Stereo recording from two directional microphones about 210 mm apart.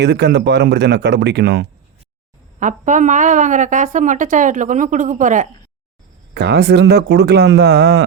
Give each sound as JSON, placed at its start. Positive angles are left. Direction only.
{"t": 0.0, "sound": "speech", "side_deg": -55}
{"t": 2.6, "sound": "a woman's voice", "side_deg": -35}
{"t": 6.3, "sound": "speech", "side_deg": -50}